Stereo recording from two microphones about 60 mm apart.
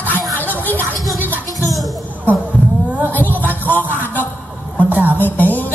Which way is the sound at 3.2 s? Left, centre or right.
Left.